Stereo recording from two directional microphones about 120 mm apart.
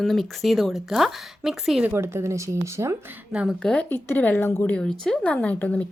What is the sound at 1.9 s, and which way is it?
Speech, 20° right (ahead or behind).